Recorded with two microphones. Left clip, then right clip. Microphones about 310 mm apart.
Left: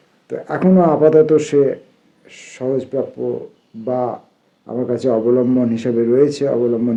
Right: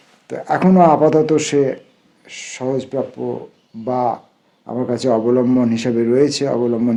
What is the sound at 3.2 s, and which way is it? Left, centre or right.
A man's voice, right.